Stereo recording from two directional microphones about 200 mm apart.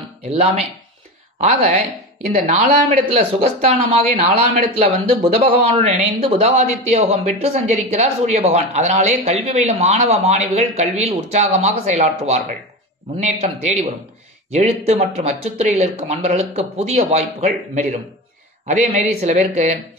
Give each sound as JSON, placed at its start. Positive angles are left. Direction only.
{"t": 0.2, "sound": "speech", "side_deg": -30}
{"t": 14.9, "sound": "speech", "side_deg": -30}